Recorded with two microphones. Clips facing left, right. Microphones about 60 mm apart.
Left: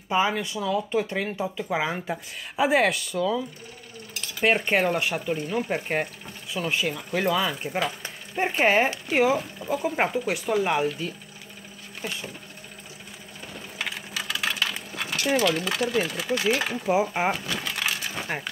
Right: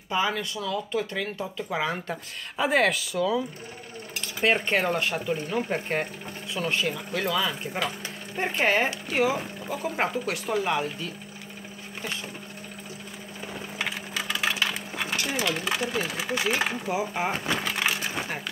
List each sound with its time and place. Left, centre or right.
0.1 s speech: left; by 3.4 s centre
4.2 s speech: centre
7.2 s speech: left
13.7 s sewing machine: centre
15.3 s speech: centre
16.8 s speech: left
17.3 s a sound: right